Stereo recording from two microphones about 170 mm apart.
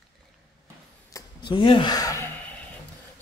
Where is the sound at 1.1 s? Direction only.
25° left (ahead or behind).